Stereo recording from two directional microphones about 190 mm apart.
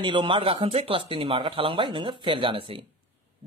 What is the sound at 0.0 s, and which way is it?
Speech, 25° right (ahead or behind).